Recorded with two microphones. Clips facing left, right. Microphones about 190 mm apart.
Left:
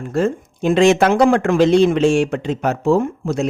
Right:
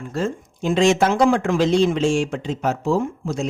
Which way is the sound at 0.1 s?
60° left (ahead or behind).